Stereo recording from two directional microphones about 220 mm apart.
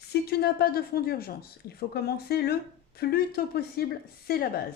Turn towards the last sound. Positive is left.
turn(degrees=45)  # may be behind; listen again after turning